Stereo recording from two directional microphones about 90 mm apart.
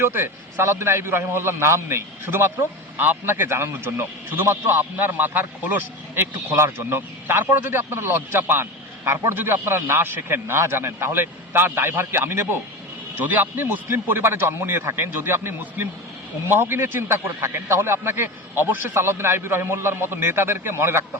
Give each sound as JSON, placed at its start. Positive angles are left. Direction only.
{"t": 0.0, "sound": "a man's voice", "side_deg": -25}